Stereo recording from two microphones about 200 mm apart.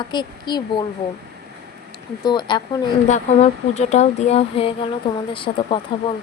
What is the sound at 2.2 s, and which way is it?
Speech, 20° left (ahead or behind).